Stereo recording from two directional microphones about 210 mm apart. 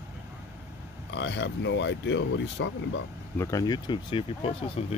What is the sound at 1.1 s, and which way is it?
Speech, 55° left (ahead or behind).